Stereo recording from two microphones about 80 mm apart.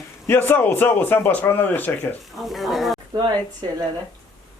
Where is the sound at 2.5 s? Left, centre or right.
Centre.